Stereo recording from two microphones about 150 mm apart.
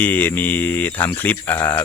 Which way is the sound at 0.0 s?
10° left (ahead or behind).